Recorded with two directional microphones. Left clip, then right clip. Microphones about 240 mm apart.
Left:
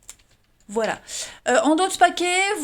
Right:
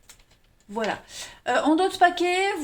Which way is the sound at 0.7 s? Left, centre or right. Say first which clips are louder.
Left 4 dB; left.